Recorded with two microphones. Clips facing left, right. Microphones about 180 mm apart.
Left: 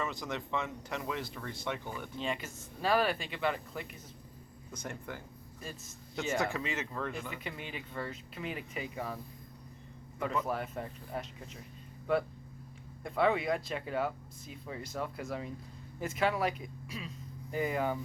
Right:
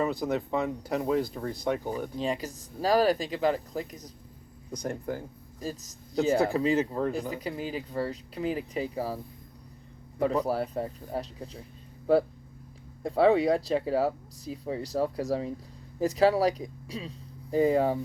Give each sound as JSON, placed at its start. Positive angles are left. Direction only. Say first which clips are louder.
{"t": 0.0, "sound": "speech", "louder": "right 9 dB", "side_deg": -35}